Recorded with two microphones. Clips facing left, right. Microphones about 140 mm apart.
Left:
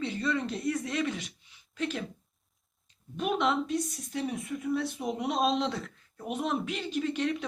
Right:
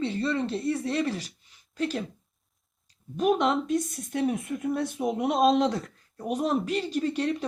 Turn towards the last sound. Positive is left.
turn(degrees=-35)  # may be behind; listen again after turning